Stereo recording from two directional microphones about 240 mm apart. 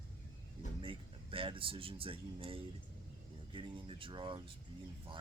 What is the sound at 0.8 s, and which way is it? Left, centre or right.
Speech, right.